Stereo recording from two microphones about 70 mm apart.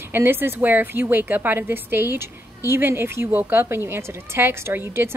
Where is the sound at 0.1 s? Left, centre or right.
Right.